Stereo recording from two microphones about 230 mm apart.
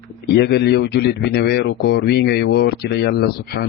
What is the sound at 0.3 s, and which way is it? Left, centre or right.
Speech, left.